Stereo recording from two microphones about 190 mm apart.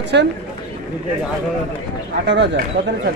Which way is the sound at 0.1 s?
65° right (ahead or behind).